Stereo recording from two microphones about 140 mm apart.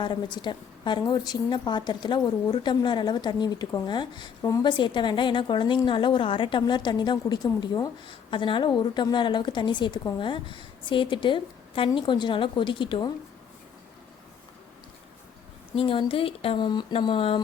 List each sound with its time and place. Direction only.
0.0 s a woman's voice: 35° left (ahead or behind)
15.7 s a woman's voice: 40° left (ahead or behind)